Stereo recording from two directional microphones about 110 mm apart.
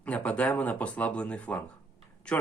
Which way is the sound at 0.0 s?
15° left (ahead or behind).